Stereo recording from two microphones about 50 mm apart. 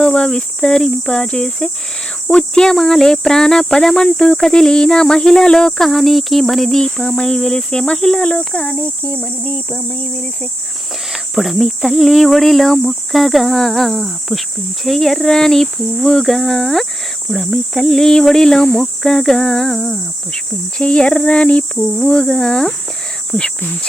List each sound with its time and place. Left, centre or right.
0.0 s speech: centre
8.2 s a sound: left
11.1 s speech: centre